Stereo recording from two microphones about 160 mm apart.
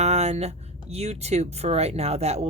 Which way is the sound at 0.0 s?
45° right (ahead or behind).